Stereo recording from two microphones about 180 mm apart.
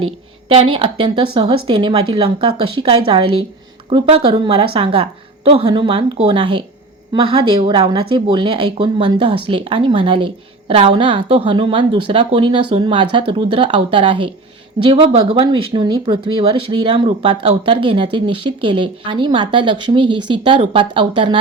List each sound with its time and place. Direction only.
0.0 s speech: 30° right (ahead or behind)